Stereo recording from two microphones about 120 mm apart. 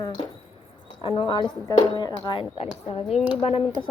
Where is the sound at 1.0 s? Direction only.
45° left (ahead or behind).